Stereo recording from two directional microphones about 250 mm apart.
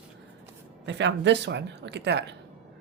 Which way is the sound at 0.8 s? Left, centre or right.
Right.